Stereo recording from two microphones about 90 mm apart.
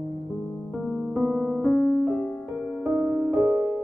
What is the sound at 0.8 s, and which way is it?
Piano, 5° left (ahead or behind).